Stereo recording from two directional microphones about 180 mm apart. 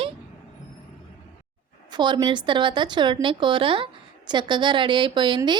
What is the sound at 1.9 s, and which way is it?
Speech, 25° right (ahead or behind).